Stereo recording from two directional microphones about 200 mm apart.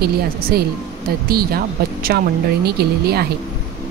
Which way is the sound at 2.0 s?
50° right (ahead or behind).